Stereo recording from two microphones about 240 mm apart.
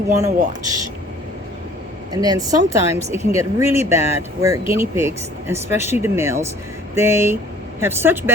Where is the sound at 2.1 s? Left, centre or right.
Centre.